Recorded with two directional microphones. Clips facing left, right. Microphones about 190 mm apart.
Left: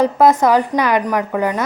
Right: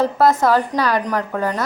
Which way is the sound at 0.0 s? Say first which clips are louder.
Left 3 dB; 15° left (ahead or behind).